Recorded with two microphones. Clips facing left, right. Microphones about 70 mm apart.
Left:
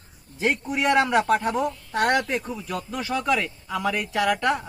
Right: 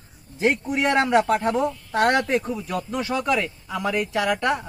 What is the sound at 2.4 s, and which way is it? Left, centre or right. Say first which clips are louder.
Speech: right 3 dB; centre.